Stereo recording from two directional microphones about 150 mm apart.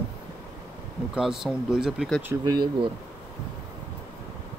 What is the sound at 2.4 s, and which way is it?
Speech, 30° right (ahead or behind).